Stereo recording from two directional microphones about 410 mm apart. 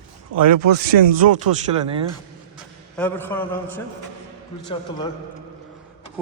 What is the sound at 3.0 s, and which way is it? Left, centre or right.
Speech, centre.